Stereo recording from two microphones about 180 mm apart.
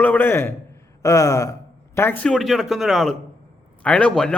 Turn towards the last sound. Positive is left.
turn(degrees=5)  # may be behind; listen again after turning